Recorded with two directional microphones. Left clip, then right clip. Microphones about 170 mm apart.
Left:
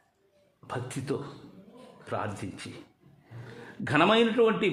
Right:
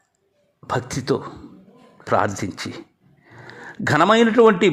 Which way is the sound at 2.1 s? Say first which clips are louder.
Right 14 dB; 45° right (ahead or behind).